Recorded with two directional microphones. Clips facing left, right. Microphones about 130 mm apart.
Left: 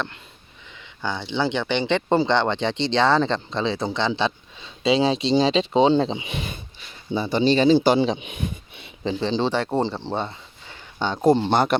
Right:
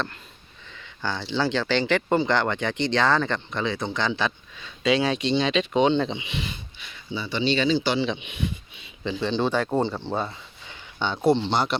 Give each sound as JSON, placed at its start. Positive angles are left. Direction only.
{"t": 1.0, "sound": "speech", "side_deg": 20}
{"t": 6.2, "sound": "speech", "side_deg": 45}
{"t": 9.2, "sound": "speech", "side_deg": 30}
{"t": 11.0, "sound": "speech", "side_deg": 40}